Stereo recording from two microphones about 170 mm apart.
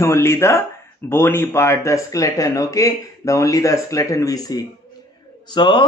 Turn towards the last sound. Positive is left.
turn(degrees=25)  # may be behind; listen again after turning